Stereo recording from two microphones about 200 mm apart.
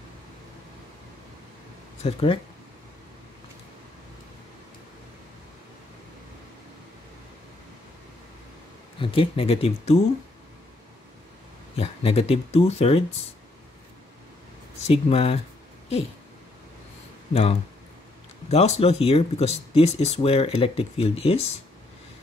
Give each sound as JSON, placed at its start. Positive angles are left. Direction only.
{"t": 2.0, "sound": "speech", "side_deg": 30}
{"t": 9.0, "sound": "speech", "side_deg": 25}
{"t": 11.7, "sound": "speech", "side_deg": 30}
{"t": 14.9, "sound": "speech", "side_deg": 30}
{"t": 17.3, "sound": "speech", "side_deg": 30}